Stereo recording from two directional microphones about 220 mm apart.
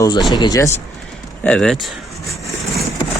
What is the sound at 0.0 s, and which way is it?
Speech, 15° left (ahead or behind).